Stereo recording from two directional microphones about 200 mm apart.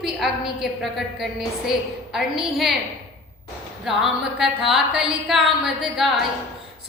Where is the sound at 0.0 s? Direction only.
Centre (ahead or behind).